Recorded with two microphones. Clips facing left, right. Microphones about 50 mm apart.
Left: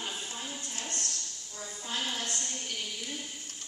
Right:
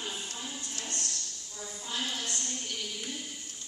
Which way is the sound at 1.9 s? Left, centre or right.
Left.